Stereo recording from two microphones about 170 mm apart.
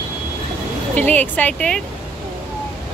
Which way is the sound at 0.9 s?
10° left (ahead or behind).